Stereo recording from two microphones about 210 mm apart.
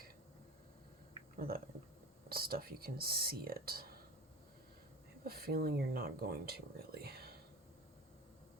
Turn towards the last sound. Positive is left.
turn(degrees=-50)  # may be behind; listen again after turning